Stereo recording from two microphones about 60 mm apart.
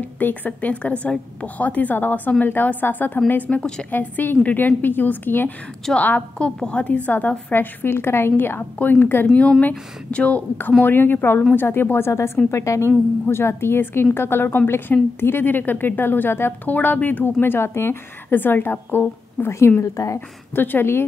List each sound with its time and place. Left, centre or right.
0.2 s a woman's voice: left
3.9 s a woman's voice: left
5.9 s a woman's voice: left
7.5 s a woman's voice: left
9.3 s a woman's voice: left
10.8 s a woman's voice: left
19.8 s speech: left
20.5 s a woman's voice: left